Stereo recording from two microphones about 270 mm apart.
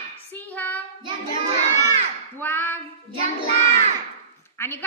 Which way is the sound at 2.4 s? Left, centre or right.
Centre.